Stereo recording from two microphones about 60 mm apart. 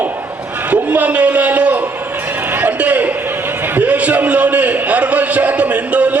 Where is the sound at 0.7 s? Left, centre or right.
Right.